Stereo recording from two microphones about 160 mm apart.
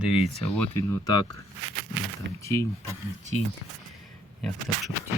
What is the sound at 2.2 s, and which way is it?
Speech, 90° right.